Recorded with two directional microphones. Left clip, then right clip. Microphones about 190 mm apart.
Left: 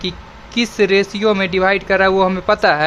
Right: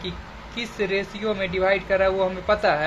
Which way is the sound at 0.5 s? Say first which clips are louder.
Left 11 dB; 50° left (ahead or behind).